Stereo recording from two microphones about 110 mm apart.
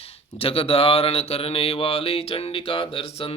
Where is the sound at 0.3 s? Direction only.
60° left (ahead or behind).